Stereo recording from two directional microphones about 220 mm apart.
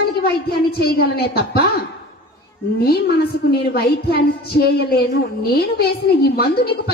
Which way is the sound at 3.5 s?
45° left (ahead or behind).